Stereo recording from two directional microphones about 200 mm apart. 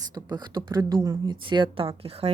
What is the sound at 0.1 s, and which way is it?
Speech, 20° right (ahead or behind).